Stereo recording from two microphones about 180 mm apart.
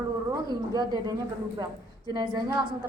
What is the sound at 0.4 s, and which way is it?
A woman's voice, 20° right (ahead or behind).